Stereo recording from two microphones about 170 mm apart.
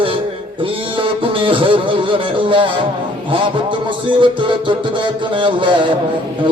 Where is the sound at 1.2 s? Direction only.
30° right (ahead or behind).